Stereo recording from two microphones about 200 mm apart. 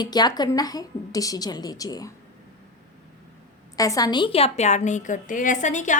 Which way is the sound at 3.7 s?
15° left (ahead or behind).